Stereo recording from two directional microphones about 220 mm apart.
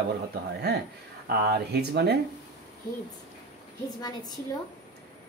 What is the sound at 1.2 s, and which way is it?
Speech, 45° right (ahead or behind).